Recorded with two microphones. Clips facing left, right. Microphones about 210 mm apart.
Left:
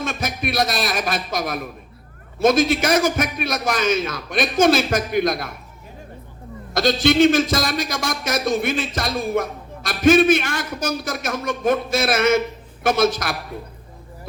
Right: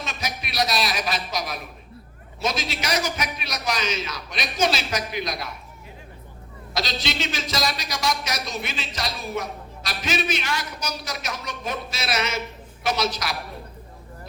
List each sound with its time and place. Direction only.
0.0 s a man's voice: 50° left (ahead or behind)
6.7 s a man's voice: 50° left (ahead or behind)